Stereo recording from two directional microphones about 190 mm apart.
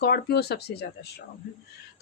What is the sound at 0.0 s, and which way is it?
Speech, 55° left (ahead or behind).